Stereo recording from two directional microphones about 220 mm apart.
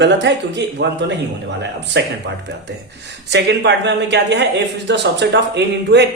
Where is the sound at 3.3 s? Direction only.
50° right (ahead or behind).